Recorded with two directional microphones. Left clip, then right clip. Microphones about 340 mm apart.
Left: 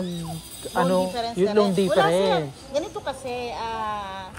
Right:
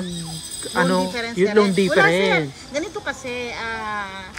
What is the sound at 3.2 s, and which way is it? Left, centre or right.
Speech, right.